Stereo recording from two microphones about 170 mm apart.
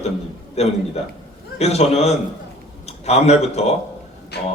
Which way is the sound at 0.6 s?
40° left (ahead or behind).